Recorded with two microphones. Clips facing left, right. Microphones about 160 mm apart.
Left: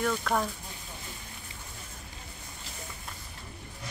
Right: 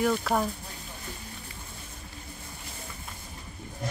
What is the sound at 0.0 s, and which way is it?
Speech, 10° right (ahead or behind).